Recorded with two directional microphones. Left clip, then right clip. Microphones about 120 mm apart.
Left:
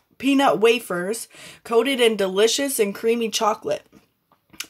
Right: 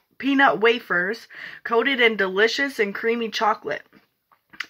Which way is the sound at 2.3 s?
55° left (ahead or behind).